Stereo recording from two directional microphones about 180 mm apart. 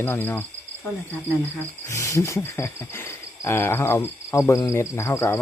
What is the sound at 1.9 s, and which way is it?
Speech, 15° left (ahead or behind).